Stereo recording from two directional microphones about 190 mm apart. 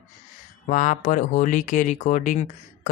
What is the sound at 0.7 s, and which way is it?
Speech, 40° left (ahead or behind).